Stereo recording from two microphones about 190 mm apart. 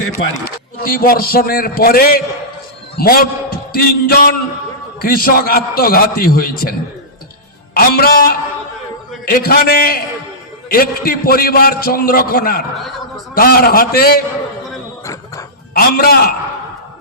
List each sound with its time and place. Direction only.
0.8 s a man's voice: 50° left (ahead or behind)
15.0 s a sound: 15° left (ahead or behind)
15.7 s a man's voice: 50° left (ahead or behind)